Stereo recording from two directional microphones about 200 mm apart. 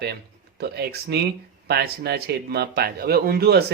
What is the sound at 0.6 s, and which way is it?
Speech, 55° right (ahead or behind).